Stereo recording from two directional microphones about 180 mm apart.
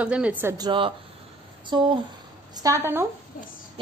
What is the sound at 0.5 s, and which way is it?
A woman's voice, 25° right (ahead or behind).